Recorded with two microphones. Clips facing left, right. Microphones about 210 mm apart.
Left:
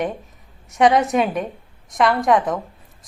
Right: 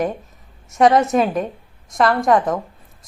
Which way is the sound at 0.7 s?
Centre (ahead or behind).